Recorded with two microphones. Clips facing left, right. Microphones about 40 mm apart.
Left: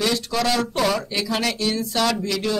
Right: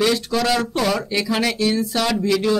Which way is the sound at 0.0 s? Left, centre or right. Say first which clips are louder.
Right 3 dB; centre.